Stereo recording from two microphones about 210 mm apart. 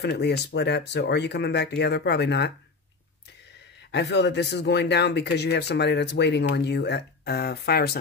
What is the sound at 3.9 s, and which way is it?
Speech, 55° left (ahead or behind).